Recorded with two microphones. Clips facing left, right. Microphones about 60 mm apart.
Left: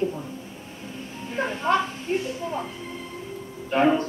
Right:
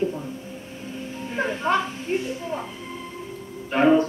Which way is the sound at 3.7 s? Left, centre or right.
Centre.